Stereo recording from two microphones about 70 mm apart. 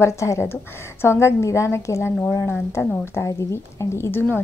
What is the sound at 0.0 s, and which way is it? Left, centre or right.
A woman's voice, left.